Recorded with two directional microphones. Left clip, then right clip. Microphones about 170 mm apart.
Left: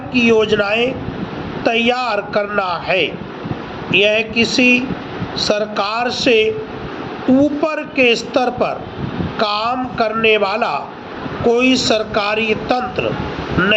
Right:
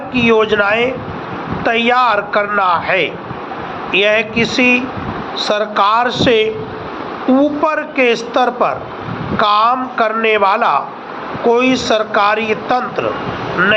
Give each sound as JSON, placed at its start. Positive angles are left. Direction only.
{"t": 0.1, "sound": "a man's voice", "side_deg": 20}
{"t": 13.6, "sound": "a man's voice", "side_deg": 30}